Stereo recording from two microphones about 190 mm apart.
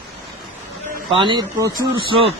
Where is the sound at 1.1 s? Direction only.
25° right (ahead or behind).